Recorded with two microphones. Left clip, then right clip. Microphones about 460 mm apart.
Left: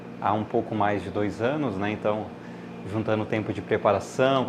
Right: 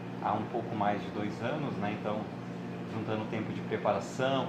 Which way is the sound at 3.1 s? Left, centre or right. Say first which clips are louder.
Left 9 dB; left.